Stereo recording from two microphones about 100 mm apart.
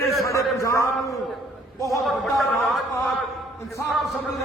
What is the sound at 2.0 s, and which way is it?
Speech, centre (ahead or behind).